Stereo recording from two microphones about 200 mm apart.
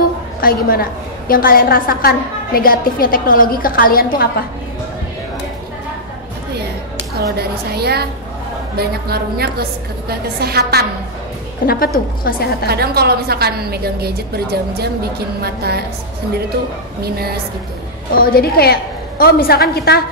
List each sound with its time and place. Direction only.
0.4 s a woman's voice: 45° left (ahead or behind)
7.2 s a woman's voice: 50° right (ahead or behind)
11.6 s a woman's voice: 50° left (ahead or behind)
12.6 s a woman's voice: 50° right (ahead or behind)
17.0 s a woman's voice: 50° right (ahead or behind)
18.1 s a woman's voice: 50° left (ahead or behind)